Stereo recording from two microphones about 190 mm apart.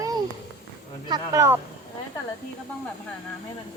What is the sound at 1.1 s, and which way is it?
Speech, 15° right (ahead or behind).